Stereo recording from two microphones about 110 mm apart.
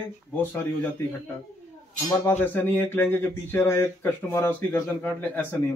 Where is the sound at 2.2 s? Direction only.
15° left (ahead or behind).